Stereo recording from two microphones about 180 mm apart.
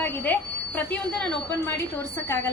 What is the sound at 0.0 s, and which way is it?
A woman's voice, 10° left (ahead or behind).